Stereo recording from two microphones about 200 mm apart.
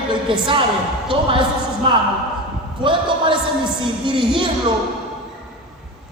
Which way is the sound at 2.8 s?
25° right (ahead or behind).